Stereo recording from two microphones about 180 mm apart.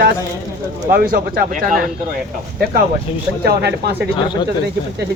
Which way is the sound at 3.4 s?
65° right (ahead or behind).